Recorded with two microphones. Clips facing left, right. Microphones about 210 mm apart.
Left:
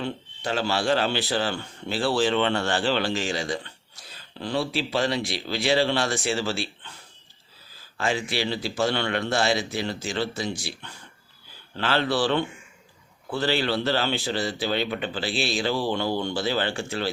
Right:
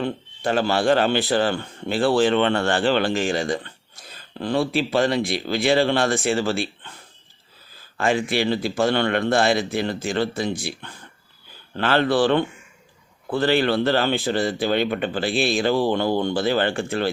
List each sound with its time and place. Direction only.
0.0 s speech: 50° right (ahead or behind)
7.9 s speech: 55° right (ahead or behind)